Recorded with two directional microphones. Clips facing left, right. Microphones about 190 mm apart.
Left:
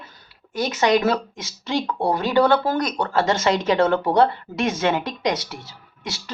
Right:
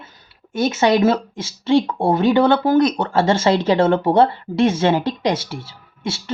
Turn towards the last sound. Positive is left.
turn(degrees=-25)  # may be behind; listen again after turning